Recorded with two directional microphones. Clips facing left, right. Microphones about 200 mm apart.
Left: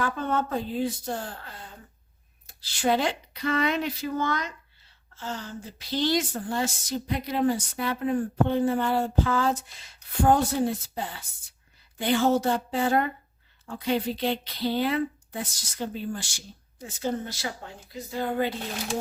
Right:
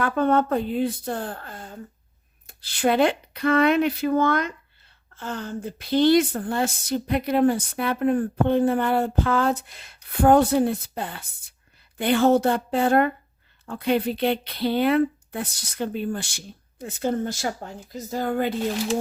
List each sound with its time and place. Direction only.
0.0 s a woman's voice: 60° right (ahead or behind)